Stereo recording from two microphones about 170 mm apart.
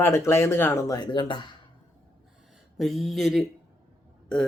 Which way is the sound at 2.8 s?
Centre (ahead or behind).